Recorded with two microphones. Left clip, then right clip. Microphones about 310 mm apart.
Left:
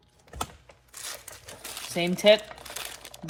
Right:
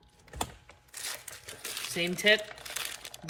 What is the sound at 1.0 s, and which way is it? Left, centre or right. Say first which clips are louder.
Crumpling: even; centre.